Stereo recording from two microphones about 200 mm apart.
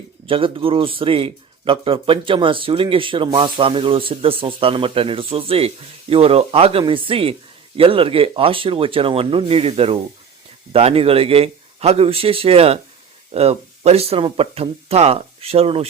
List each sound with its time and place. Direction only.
0.3 s speech: 25° right (ahead or behind)